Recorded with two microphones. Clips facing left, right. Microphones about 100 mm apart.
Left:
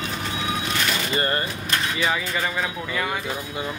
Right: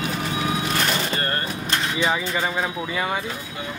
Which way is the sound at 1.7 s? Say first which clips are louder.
Right 1 dB; 20° right (ahead or behind).